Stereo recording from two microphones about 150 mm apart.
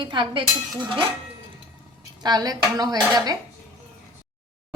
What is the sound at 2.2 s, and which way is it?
Speech, 25° right (ahead or behind).